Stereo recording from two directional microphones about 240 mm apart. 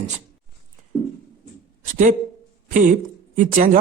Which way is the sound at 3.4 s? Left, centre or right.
Right.